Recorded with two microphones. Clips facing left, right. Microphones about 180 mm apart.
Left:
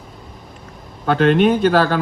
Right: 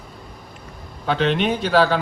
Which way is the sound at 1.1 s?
50° left (ahead or behind).